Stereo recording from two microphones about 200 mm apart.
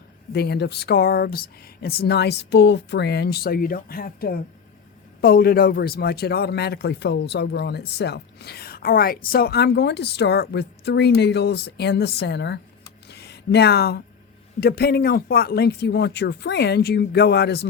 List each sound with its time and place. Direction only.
0.3 s a man's voice: 55° left (ahead or behind)
13.1 s a sound: 55° left (ahead or behind)
14.6 s speech: 50° left (ahead or behind)